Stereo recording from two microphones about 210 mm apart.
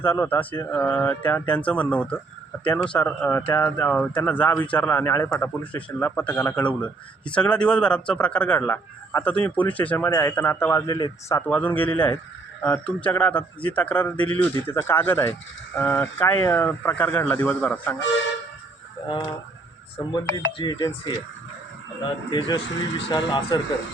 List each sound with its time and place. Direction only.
0.0 s a man's voice: 10° left (ahead or behind)
20.0 s speech: 20° left (ahead or behind)
22.3 s speech: 25° left (ahead or behind)